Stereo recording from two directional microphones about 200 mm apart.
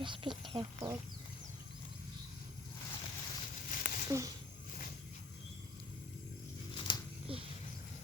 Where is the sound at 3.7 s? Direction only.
45° left (ahead or behind).